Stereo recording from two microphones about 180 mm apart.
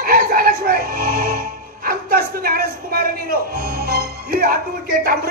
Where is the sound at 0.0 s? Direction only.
55° right (ahead or behind).